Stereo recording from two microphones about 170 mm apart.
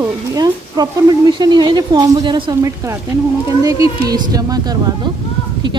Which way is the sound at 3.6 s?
20° right (ahead or behind).